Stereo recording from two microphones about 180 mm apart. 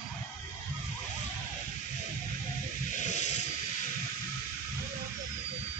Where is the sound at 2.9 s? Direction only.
40° left (ahead or behind).